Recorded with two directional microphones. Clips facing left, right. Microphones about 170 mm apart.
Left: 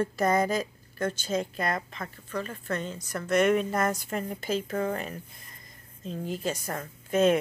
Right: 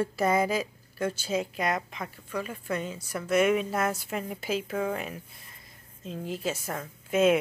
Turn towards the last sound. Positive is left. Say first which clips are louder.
# even
turn(degrees=-5)  # may be behind; listen again after turning